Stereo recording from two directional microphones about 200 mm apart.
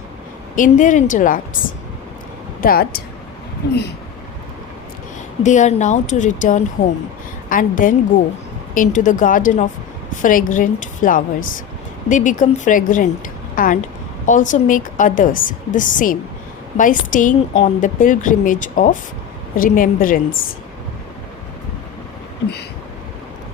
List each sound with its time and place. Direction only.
0.5 s a woman's voice: 40° left (ahead or behind)
2.6 s a woman's voice: 45° left (ahead or behind)
5.4 s a woman's voice: 40° left (ahead or behind)